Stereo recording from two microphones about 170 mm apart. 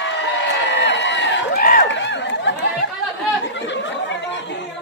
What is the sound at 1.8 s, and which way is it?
Chatter, 90° left.